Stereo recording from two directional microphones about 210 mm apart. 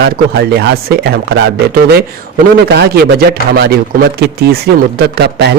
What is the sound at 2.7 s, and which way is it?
Speech, 50° right (ahead or behind).